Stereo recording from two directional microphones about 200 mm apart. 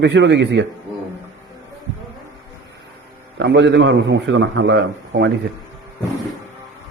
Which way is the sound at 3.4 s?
65° right (ahead or behind).